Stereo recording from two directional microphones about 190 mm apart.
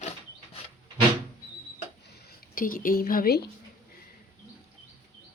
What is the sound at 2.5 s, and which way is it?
Speech, 45° left (ahead or behind).